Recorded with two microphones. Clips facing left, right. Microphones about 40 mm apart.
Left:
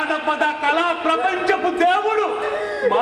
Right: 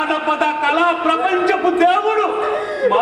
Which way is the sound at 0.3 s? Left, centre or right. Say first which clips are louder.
Right 3 dB; right.